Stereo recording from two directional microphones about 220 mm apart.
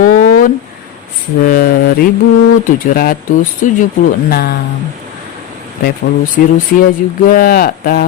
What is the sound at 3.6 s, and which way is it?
Speech, 35° left (ahead or behind).